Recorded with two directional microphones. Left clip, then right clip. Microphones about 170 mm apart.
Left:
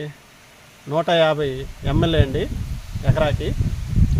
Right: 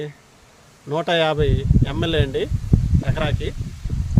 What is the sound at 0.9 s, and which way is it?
Speech, 25° right (ahead or behind).